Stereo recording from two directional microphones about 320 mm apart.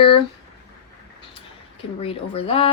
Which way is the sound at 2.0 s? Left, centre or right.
Centre.